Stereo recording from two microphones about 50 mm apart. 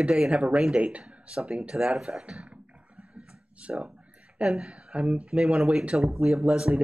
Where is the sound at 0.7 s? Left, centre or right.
Right; by 2.2 s centre.